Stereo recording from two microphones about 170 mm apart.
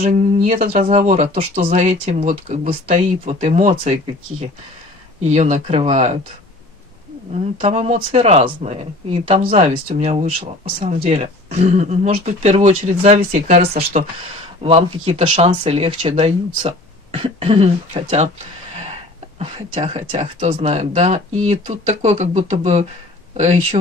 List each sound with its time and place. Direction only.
0.0 s speech: 40° right (ahead or behind)
2.3 s speech: 35° right (ahead or behind)
5.2 s speech: 45° right (ahead or behind)
7.3 s speech: 40° right (ahead or behind)
19.4 s speech: 35° right (ahead or behind)